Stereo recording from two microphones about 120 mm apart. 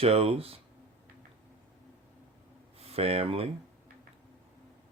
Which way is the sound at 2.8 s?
55° right (ahead or behind).